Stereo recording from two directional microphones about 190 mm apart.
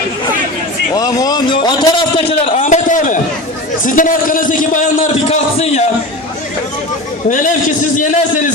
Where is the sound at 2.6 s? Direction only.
40° left (ahead or behind).